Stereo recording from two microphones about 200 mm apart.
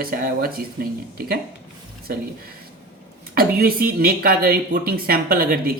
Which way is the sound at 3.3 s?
50° right (ahead or behind).